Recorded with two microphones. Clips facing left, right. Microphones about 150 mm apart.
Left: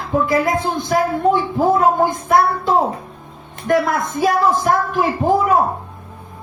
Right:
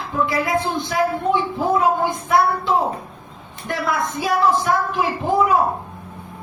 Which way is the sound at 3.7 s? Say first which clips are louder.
Left 6 dB; 45° left (ahead or behind).